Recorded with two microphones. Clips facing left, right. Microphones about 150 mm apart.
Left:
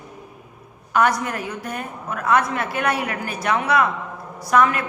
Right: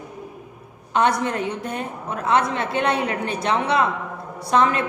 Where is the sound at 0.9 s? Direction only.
25° right (ahead or behind).